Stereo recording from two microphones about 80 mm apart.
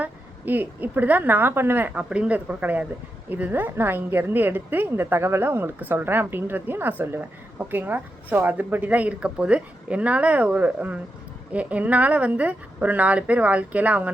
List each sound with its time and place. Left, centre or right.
0.0 s a woman's voice: right